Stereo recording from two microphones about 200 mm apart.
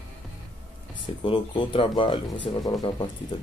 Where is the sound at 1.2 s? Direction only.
25° left (ahead or behind).